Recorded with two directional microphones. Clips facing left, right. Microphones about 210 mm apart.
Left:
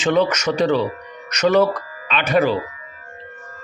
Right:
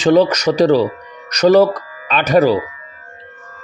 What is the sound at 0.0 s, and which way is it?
Speech, 35° right (ahead or behind).